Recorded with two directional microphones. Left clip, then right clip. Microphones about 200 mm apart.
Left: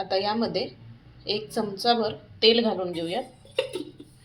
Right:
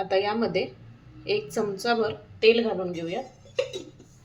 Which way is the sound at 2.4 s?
15° left (ahead or behind).